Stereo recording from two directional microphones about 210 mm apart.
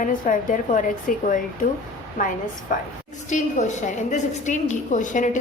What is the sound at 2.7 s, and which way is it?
A woman's voice, 40° left (ahead or behind).